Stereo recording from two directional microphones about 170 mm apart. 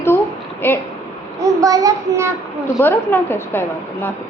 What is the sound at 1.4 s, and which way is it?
Speech, 20° right (ahead or behind).